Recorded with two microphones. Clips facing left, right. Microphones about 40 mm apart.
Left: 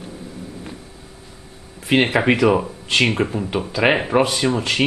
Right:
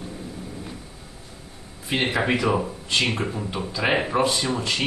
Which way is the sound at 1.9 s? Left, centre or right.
Left.